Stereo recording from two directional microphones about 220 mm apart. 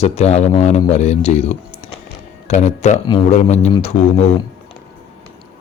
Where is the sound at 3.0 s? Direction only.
20° left (ahead or behind).